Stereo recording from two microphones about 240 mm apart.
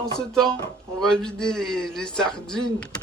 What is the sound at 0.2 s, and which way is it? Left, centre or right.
A man's voice, centre.